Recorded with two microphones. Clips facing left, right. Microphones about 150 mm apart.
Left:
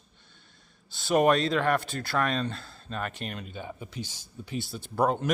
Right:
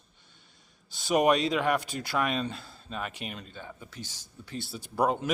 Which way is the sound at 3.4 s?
15° left (ahead or behind).